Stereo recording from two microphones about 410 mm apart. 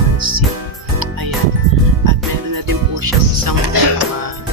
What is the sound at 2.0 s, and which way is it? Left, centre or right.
Music, right.